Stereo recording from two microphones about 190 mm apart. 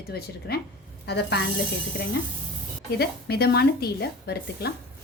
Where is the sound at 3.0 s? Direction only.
60° left (ahead or behind).